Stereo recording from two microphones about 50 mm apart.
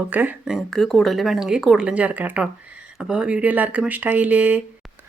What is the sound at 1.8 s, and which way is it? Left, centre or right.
Speech, right.